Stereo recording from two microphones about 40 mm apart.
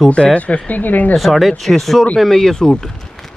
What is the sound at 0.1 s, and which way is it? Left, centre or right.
Speech, left.